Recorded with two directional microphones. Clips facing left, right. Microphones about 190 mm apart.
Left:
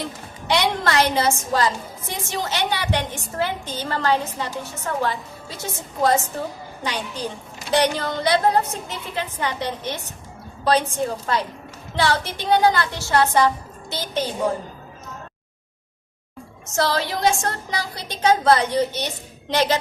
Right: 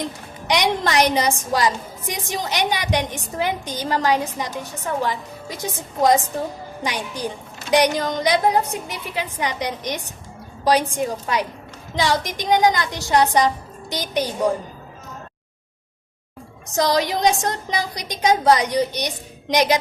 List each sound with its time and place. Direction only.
0.0 s a woman's voice: 15° right (ahead or behind)
16.7 s a woman's voice: 15° right (ahead or behind)